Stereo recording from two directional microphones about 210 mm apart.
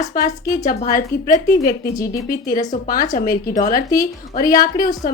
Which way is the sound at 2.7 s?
40° left (ahead or behind).